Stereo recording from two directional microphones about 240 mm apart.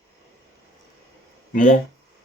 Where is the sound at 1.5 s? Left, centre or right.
Left.